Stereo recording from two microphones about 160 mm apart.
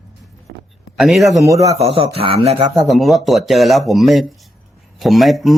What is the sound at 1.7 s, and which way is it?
Speech, 40° right (ahead or behind).